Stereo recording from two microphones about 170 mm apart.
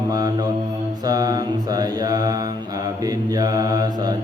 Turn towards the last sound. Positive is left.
turn(degrees=-25)  # may be behind; listen again after turning